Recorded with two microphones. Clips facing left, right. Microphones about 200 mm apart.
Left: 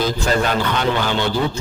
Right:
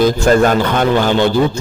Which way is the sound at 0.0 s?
50° right (ahead or behind).